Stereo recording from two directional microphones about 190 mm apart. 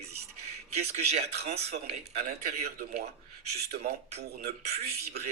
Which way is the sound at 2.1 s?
55° right (ahead or behind).